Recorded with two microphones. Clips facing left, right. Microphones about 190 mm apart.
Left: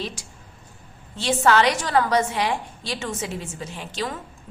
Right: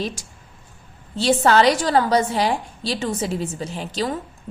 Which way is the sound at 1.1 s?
35° right (ahead or behind).